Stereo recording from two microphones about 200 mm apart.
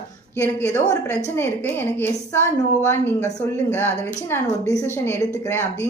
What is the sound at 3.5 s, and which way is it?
Speech, 10° left (ahead or behind).